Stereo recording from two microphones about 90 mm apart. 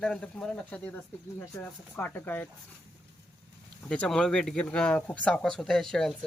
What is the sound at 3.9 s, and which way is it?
Speech, 10° left (ahead or behind).